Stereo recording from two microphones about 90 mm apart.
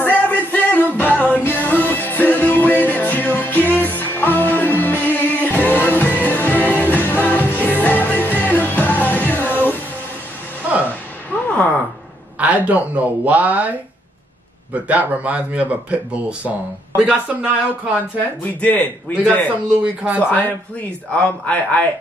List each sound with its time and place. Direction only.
0.0 s music: 20° left (ahead or behind)
10.6 s music: 20° right (ahead or behind)
11.4 s a sound: 15° left (ahead or behind)
12.4 s a sound: 15° right (ahead or behind)
14.7 s speech: 15° right (ahead or behind)
18.4 s a man's voice: 15° left (ahead or behind)
19.8 s speech: 10° right (ahead or behind)
20.2 s a man's voice: 20° left (ahead or behind)